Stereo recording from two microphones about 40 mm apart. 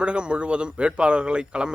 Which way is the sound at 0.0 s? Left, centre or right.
Right.